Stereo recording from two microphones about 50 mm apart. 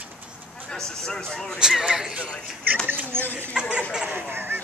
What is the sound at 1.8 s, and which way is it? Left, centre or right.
Speech, centre.